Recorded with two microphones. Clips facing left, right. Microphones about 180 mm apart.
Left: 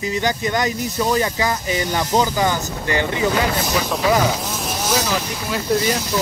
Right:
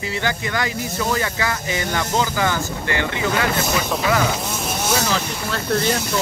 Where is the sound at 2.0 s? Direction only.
15° left (ahead or behind).